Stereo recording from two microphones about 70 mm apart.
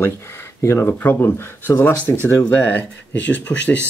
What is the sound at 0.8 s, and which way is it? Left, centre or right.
Speech, left.